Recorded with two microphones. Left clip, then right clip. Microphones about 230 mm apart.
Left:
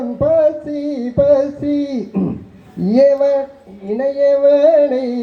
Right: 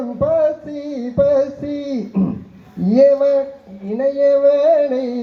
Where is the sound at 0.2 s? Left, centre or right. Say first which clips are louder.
Left 3 dB; left.